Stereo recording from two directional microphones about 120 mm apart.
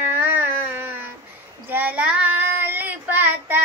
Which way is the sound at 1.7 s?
15° right (ahead or behind).